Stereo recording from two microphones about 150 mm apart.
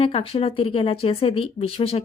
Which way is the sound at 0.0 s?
35° left (ahead or behind).